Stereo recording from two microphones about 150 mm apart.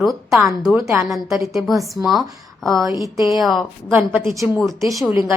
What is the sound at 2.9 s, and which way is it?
Speech, 20° right (ahead or behind).